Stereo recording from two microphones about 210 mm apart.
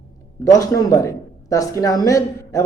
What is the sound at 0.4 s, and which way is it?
Speech, 15° left (ahead or behind).